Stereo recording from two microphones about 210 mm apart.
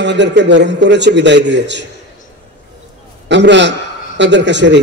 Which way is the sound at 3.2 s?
55° right (ahead or behind).